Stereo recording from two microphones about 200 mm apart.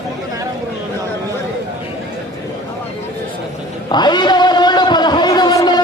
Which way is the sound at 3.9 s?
20° left (ahead or behind).